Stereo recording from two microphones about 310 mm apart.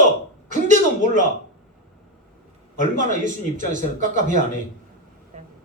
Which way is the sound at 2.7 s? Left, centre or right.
Right.